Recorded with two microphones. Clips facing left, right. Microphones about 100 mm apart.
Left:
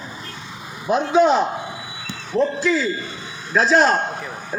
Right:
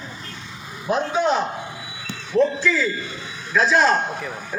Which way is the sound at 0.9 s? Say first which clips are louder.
Left 5 dB; 5° left (ahead or behind).